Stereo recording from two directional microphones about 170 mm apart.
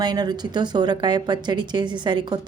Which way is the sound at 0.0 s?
25° right (ahead or behind).